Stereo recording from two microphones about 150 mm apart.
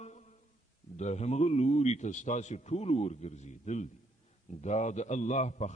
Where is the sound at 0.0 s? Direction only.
50° left (ahead or behind).